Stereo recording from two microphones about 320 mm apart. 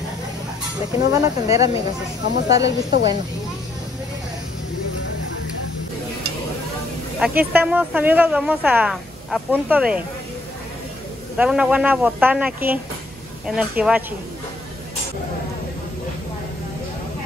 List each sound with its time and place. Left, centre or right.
0.9 s speech: centre
2.6 s a woman's voice: left
7.2 s speech: centre
11.3 s speech: centre